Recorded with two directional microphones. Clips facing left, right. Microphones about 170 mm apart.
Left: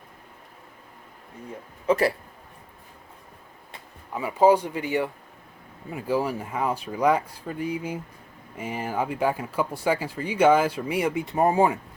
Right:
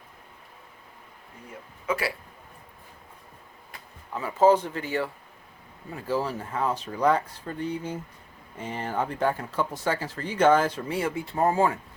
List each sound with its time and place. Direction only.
1.9 s speech: 40° left (ahead or behind)
4.1 s speech: 10° left (ahead or behind)